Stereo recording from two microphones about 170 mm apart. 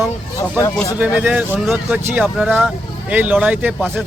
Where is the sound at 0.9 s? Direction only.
10° right (ahead or behind).